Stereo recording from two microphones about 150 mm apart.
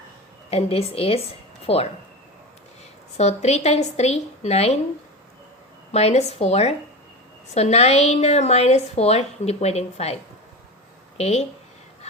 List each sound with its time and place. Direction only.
0.5 s a woman's voice: 40° left (ahead or behind)
3.2 s a woman's voice: 45° left (ahead or behind)
5.9 s a woman's voice: 45° left (ahead or behind)
11.2 s a woman's voice: 45° left (ahead or behind)